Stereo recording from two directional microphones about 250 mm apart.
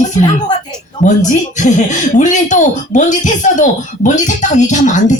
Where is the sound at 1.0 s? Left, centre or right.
Left.